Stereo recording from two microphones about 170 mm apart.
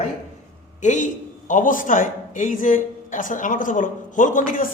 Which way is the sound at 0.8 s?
45° left (ahead or behind).